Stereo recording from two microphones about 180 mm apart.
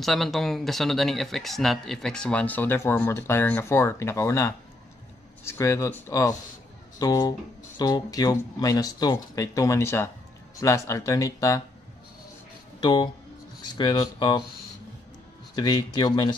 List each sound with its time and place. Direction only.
0.0 s speech: centre (ahead or behind); by 11.6 s 20° left (ahead or behind)
12.8 s speech: 25° left (ahead or behind)
15.5 s speech: 25° left (ahead or behind)